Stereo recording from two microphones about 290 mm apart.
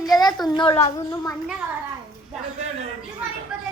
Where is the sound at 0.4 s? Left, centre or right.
Centre.